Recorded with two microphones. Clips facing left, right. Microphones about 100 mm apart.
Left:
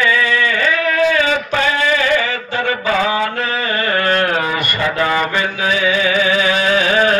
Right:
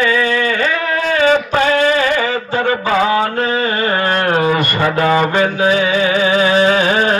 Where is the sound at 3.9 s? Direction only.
25° right (ahead or behind).